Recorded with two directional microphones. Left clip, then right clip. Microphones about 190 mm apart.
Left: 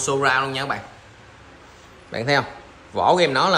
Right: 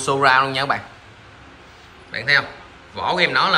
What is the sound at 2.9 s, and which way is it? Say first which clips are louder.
Speech: left 1 dB; 35° left (ahead or behind).